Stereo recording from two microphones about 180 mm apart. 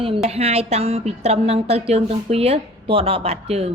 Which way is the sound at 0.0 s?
35° right (ahead or behind).